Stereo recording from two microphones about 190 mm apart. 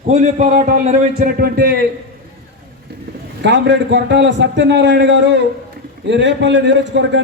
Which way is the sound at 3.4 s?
65° right (ahead or behind).